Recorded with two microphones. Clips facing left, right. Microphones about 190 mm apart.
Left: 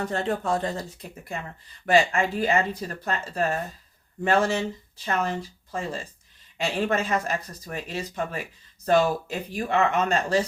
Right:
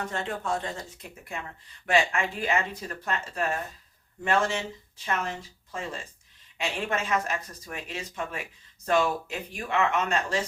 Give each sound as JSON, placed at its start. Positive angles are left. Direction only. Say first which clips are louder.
{"t": 0.0, "sound": "speech", "louder": "left 5 dB", "side_deg": 35}
{"t": 1.9, "sound": "speech", "louder": "left 4 dB", "side_deg": 35}